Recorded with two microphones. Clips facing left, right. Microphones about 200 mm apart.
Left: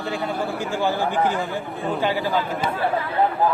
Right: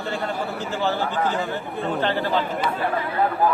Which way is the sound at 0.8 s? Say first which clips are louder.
Left 2 dB; 10° left (ahead or behind).